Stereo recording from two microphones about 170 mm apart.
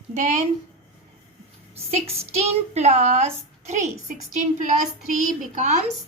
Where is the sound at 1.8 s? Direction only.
40° right (ahead or behind).